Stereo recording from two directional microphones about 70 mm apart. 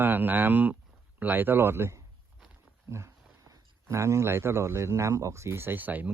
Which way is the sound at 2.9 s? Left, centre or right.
Right.